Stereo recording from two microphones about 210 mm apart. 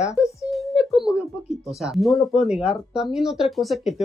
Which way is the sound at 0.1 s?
5° right (ahead or behind).